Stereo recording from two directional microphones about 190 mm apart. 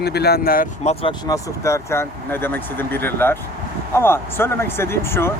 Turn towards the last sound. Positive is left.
turn(degrees=15)  # may be behind; listen again after turning